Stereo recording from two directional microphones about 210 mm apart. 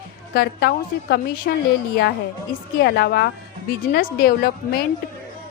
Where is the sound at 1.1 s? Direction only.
45° left (ahead or behind).